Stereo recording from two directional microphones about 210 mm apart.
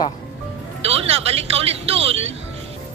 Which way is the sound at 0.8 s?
30° right (ahead or behind).